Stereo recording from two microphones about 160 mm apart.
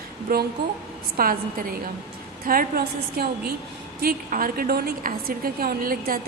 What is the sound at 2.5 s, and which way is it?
A woman's voice, 70° right (ahead or behind).